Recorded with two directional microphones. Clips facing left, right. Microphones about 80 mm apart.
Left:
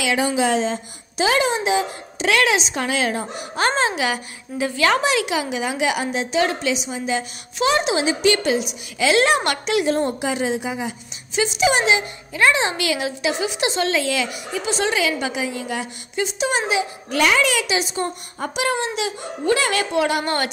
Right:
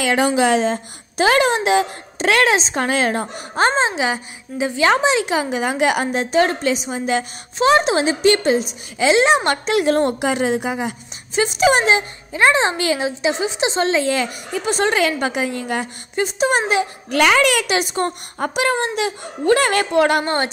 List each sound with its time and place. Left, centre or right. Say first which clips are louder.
0.0 s a woman's voice: right 3 dB; right
2.1 s a woman's voice: right 3 dB; right
3.5 s a woman's voice: right 3 dB; right
9.8 s a woman's voice: right 4 dB; right
12.3 s a woman's voice: right 3 dB; right